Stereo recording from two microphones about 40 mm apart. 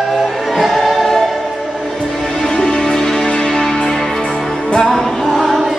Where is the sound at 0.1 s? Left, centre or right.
Centre.